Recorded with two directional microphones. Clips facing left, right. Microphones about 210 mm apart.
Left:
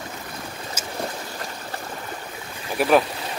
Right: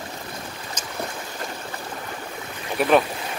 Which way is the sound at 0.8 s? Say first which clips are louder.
Left 1 dB; 10° left (ahead or behind).